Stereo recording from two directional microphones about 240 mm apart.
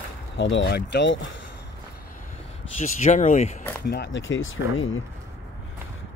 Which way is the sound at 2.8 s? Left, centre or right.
Left.